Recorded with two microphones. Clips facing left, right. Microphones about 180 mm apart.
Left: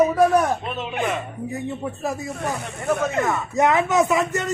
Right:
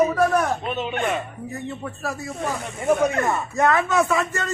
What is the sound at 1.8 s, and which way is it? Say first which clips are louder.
Speech: left 3 dB; 15° left (ahead or behind).